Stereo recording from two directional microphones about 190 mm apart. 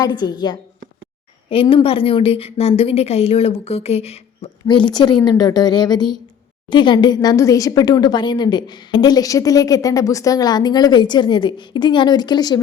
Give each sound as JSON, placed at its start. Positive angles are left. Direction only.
{"t": 0.0, "sound": "a woman's voice", "side_deg": 20}